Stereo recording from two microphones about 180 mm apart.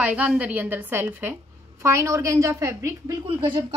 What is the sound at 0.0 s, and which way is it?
A woman's voice, 5° right (ahead or behind).